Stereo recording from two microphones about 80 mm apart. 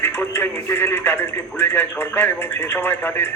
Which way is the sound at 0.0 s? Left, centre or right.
Left.